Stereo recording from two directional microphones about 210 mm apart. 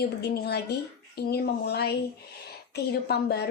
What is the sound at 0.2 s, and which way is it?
A woman's voice, 50° left (ahead or behind).